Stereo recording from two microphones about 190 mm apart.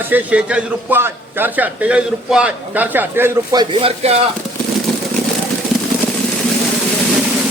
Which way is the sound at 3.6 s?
30° right (ahead or behind).